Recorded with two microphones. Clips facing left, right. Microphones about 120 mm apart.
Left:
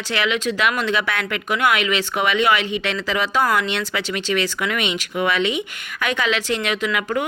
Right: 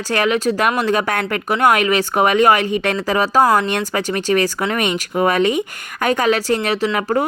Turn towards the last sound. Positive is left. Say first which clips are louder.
# right 4 dB
turn(degrees=-40)  # may be behind; listen again after turning